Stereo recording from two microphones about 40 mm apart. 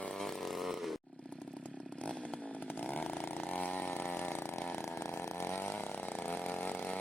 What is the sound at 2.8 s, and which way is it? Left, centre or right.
Chainsaw, left.